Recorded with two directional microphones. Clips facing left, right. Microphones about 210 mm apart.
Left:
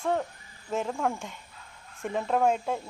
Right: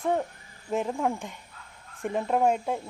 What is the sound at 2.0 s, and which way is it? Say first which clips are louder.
Speech: right 1 dB; 5° right (ahead or behind).